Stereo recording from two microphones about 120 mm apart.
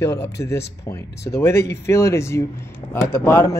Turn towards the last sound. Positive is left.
turn(degrees=20)  # may be behind; listen again after turning